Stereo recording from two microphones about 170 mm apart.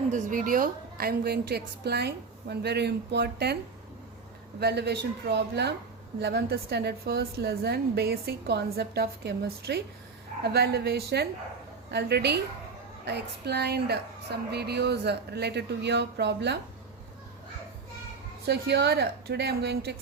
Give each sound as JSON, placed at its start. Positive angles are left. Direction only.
{"t": 0.1, "sound": "a woman's voice", "side_deg": -50}
{"t": 4.6, "sound": "a woman's voice", "side_deg": -75}
{"t": 18.4, "sound": "a woman's voice", "side_deg": -80}